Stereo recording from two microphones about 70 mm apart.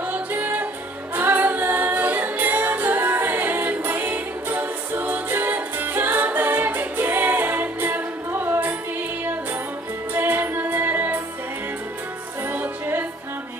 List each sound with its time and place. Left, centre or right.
0.0 s music: right
10.1 s music: right
12.4 s music: right